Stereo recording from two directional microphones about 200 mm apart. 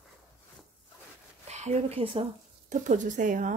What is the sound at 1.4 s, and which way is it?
A woman's voice, 35° right (ahead or behind).